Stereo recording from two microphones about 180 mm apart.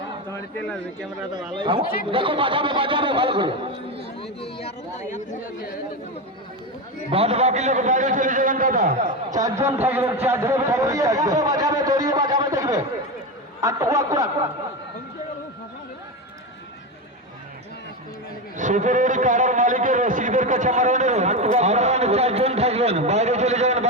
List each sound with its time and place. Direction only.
2.0 s speech: 30° right (ahead or behind)
4.2 s speech: 30° left (ahead or behind)
7.1 s a man's voice: 35° right (ahead or behind)
9.3 s a man's voice: 15° right (ahead or behind)
18.5 s a man's voice: 45° right (ahead or behind)